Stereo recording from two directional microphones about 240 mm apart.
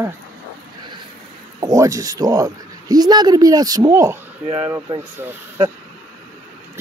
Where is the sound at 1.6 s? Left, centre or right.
Centre.